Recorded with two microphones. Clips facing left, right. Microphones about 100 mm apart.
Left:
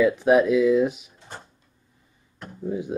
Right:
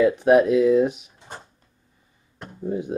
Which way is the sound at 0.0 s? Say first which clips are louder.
Right 2 dB; centre (ahead or behind).